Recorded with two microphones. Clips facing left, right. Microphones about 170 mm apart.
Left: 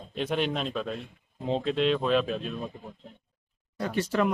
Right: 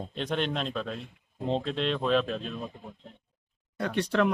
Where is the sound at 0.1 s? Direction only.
5° left (ahead or behind).